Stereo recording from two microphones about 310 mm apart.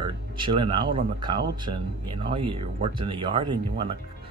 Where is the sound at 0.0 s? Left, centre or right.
Centre.